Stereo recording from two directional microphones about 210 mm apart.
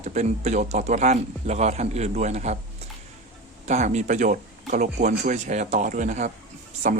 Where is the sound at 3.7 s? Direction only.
35° right (ahead or behind).